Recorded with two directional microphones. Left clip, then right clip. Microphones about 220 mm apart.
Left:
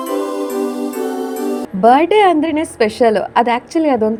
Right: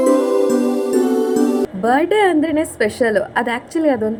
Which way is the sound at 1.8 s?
30° left (ahead or behind).